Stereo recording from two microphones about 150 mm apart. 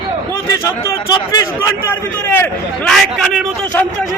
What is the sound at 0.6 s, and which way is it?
Speech, 20° left (ahead or behind).